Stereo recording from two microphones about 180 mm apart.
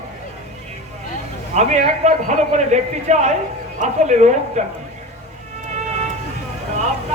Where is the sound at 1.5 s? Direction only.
40° right (ahead or behind).